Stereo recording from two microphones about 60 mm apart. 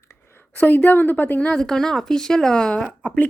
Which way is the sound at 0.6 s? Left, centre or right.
Left.